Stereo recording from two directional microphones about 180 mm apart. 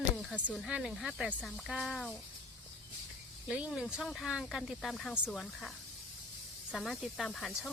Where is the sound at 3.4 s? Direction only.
5° right (ahead or behind).